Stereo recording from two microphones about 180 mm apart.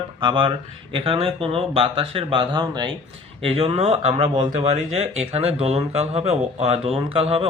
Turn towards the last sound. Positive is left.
turn(degrees=-30)  # may be behind; listen again after turning